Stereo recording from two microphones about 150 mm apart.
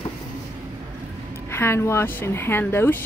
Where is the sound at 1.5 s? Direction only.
15° left (ahead or behind).